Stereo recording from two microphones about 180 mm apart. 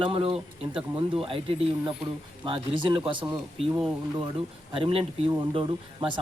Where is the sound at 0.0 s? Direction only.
30° right (ahead or behind).